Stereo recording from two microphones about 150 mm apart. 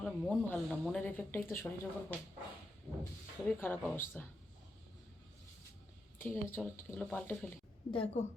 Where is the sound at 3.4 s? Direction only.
10° left (ahead or behind).